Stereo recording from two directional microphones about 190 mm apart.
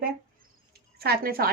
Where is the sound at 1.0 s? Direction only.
55° right (ahead or behind).